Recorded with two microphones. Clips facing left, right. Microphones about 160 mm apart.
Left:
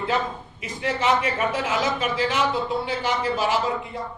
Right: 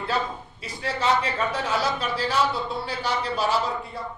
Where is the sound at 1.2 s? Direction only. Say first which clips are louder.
Left 2 dB; 10° left (ahead or behind).